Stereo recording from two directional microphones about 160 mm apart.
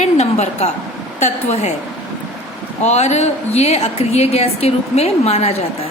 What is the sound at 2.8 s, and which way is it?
A woman's voice, 45° left (ahead or behind).